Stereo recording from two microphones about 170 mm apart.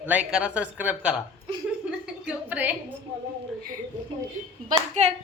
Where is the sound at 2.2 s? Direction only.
10° right (ahead or behind).